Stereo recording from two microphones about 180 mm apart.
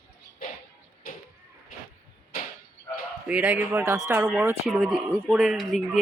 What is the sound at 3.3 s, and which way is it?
Speech, 5° right (ahead or behind).